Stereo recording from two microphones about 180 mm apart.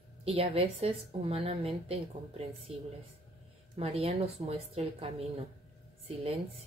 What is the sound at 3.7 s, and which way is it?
A woman's voice, 35° right (ahead or behind).